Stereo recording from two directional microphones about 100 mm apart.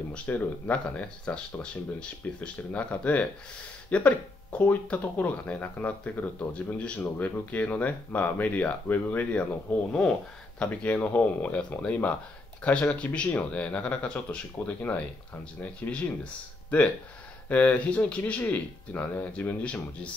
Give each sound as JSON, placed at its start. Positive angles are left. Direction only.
{"t": 0.1, "sound": "speech", "side_deg": 15}
{"t": 17.5, "sound": "speech", "side_deg": 15}